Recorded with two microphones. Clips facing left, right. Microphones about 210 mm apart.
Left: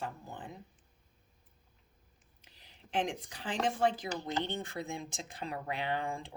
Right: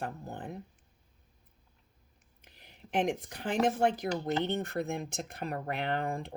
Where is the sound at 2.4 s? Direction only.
60° right (ahead or behind).